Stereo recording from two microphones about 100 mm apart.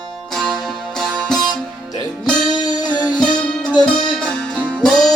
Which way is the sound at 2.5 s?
40° left (ahead or behind).